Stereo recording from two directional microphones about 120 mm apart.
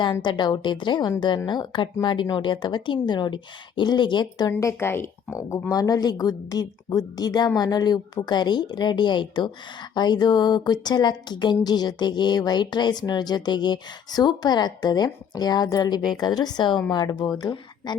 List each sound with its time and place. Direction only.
0.0 s speech: 40° left (ahead or behind)
4.6 s speech: 20° left (ahead or behind); by 17.9 s 40° left (ahead or behind)